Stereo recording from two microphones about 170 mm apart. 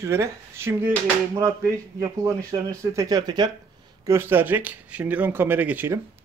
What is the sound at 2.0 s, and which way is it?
Speech, 20° right (ahead or behind).